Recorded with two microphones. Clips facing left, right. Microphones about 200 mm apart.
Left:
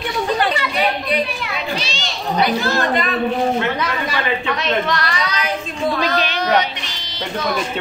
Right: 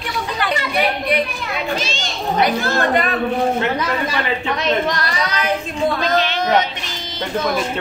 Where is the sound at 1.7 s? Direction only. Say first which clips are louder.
Right 2 dB; 50° right (ahead or behind).